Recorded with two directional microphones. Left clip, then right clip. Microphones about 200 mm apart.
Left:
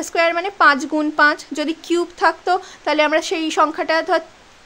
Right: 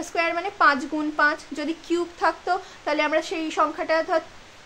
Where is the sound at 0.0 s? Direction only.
50° left (ahead or behind).